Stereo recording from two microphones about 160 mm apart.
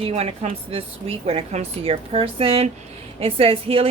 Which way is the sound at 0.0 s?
40° right (ahead or behind).